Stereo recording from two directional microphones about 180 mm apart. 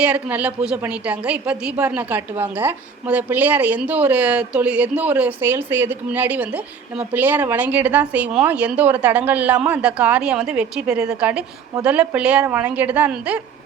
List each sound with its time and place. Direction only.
0.0 s a woman's voice: 10° right (ahead or behind)